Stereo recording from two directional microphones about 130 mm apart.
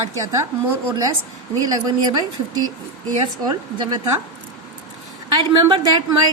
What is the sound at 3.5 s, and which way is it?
Speech, 30° right (ahead or behind).